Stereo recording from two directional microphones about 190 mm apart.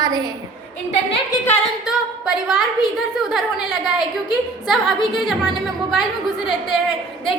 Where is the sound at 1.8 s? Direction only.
5° right (ahead or behind).